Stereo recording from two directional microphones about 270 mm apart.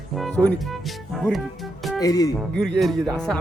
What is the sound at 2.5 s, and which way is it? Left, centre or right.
Speech, centre.